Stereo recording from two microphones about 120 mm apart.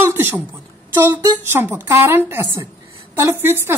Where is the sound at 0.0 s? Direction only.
20° right (ahead or behind).